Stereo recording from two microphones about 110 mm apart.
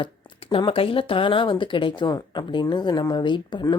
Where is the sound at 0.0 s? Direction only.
55° left (ahead or behind).